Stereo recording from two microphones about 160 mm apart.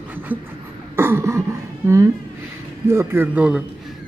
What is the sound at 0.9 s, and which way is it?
A man's voice, 15° right (ahead or behind).